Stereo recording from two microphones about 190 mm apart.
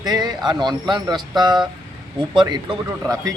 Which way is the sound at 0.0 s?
20° right (ahead or behind).